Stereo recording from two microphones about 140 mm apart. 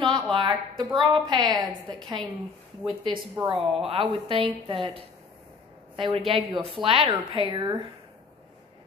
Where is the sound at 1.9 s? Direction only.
5° left (ahead or behind).